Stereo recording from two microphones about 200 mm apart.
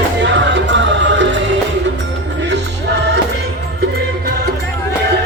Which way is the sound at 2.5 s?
60° right (ahead or behind).